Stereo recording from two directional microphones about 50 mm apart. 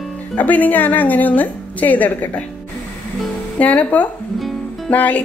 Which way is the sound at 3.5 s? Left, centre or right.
Left.